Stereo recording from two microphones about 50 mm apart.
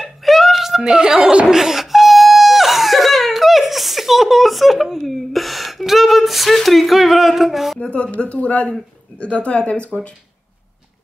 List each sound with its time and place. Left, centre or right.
0.0 s chuckle: centre
4.8 s a sound: centre
7.8 s speech: left